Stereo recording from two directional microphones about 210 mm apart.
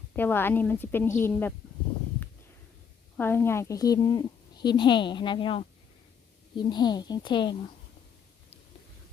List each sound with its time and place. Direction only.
0.1 s a woman's voice: 10° left (ahead or behind)
3.2 s a woman's voice: 10° left (ahead or behind)